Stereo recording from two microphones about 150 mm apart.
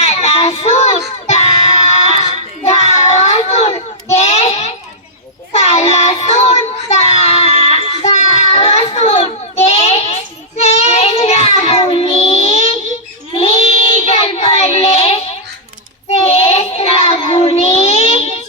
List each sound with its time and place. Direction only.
0.0 s child singing: 45° left (ahead or behind)
5.5 s child singing: 45° left (ahead or behind)
7.6 s music: 45° left (ahead or behind)
10.6 s child singing: 45° left (ahead or behind)